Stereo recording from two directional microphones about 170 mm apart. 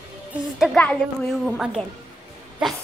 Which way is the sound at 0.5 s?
Centre (ahead or behind).